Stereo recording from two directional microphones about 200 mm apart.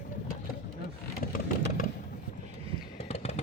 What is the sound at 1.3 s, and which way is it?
Vehicle, 45° left (ahead or behind).